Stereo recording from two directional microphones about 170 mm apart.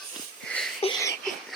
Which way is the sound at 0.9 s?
20° left (ahead or behind).